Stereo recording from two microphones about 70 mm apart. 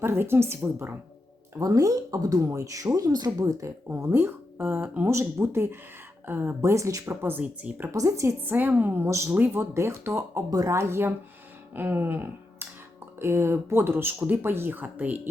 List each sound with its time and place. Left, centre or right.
0.0 s speech: right
1.5 s speech: right
2.5 s speech: right
3.4 s speech: right
5.0 s speech: right
7.2 s speech: right
7.9 s a woman's voice: right
8.4 s speech: right
9.0 s a woman's voice: right
11.7 s a sound: right
13.1 s speech: right